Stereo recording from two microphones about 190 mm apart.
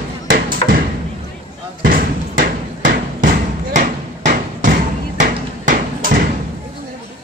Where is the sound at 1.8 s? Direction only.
45° right (ahead or behind).